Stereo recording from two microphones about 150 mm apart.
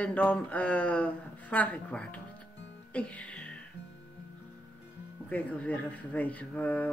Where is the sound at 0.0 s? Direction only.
10° left (ahead or behind).